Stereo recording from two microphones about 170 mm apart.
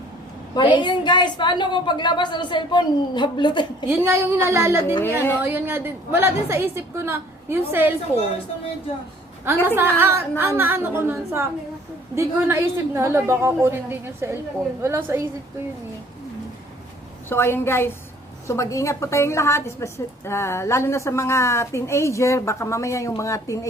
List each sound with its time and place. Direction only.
0.5 s a woman's voice: 25° left (ahead or behind)
3.8 s a woman's voice: 15° right (ahead or behind)
5.0 s a woman's voice: 15° left (ahead or behind)
5.4 s a woman's voice: 15° right (ahead or behind)
9.4 s a woman's voice: 10° right (ahead or behind)
17.2 s a woman's voice: 15° left (ahead or behind)